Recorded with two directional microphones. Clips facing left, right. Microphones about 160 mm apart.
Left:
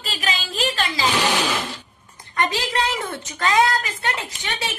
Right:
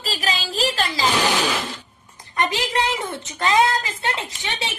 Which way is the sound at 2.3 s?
20° right (ahead or behind).